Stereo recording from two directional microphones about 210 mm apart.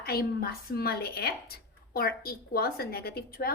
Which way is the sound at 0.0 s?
45° left (ahead or behind).